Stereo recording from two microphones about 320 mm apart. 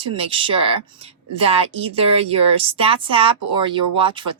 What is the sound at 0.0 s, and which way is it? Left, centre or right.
A woman's voice, centre.